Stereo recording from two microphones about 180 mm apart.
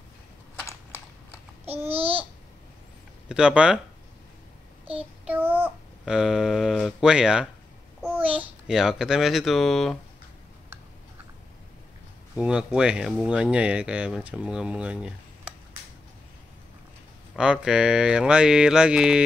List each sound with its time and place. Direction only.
1.7 s babbling: 10° right (ahead or behind)
2.0 s babbling: 30° right (ahead or behind)
3.3 s speech: 5° right (ahead or behind)
5.2 s speech: 10° right (ahead or behind)
8.0 s babbling: 10° right (ahead or behind)
8.4 s speech: 5° right (ahead or behind)
12.4 s speech: 5° right (ahead or behind)
17.4 s speech: 5° right (ahead or behind)